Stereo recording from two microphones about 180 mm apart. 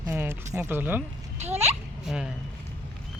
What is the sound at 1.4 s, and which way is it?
Speech, 35° right (ahead or behind).